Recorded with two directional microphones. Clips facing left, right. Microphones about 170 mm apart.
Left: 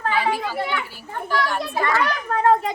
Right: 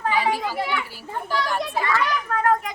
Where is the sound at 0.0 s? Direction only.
15° right (ahead or behind).